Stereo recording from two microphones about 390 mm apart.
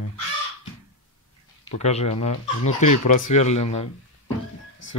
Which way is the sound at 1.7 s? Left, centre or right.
Centre.